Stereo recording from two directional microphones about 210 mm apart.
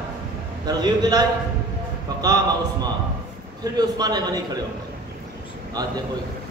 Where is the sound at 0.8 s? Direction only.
20° right (ahead or behind).